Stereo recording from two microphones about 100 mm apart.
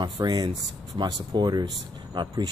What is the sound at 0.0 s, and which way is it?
Speech, 45° right (ahead or behind).